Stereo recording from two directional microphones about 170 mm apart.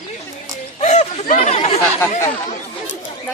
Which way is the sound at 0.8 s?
40° left (ahead or behind).